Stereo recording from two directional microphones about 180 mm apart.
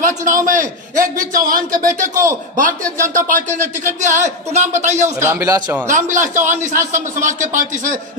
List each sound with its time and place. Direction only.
0.5 s a man's voice: 45° right (ahead or behind)
5.2 s speech: 15° right (ahead or behind)
5.9 s a man's voice: 45° right (ahead or behind)